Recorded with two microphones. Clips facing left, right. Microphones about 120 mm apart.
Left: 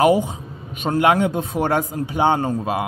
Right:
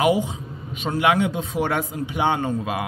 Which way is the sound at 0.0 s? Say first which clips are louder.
Left 4 dB; 45° left (ahead or behind).